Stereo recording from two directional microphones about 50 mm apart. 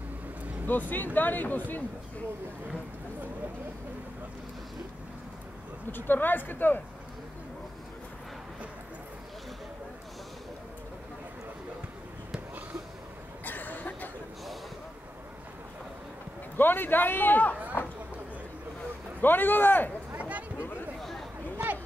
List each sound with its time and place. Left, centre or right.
0.7 s a man's voice: left
5.9 s a man's voice: left
13.5 s a sound: left
16.5 s a man's voice: left
19.2 s a man's voice: left
20.2 s a sound: right
21.0 s chatter: centre